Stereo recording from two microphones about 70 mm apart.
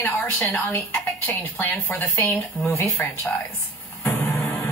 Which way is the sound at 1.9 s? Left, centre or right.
Left.